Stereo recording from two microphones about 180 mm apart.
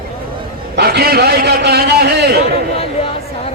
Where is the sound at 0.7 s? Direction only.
60° right (ahead or behind).